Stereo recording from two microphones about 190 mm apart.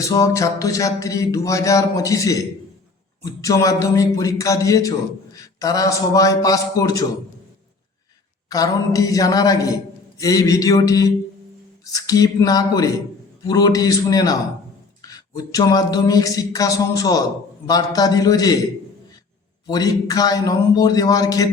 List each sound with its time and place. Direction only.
0.0 s a man's voice: 15° left (ahead or behind)
8.4 s a man's voice: 20° left (ahead or behind)
19.6 s a man's voice: 20° left (ahead or behind)